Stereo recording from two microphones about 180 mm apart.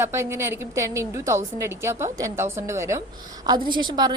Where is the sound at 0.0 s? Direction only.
15° right (ahead or behind).